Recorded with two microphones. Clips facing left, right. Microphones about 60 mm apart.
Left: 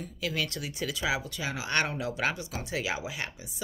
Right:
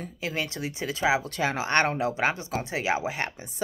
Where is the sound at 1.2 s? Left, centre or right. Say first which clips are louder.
Right 7 dB; right.